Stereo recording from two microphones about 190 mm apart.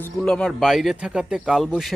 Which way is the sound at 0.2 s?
5° left (ahead or behind).